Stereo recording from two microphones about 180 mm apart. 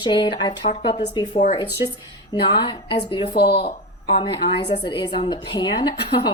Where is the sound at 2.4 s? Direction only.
25° left (ahead or behind).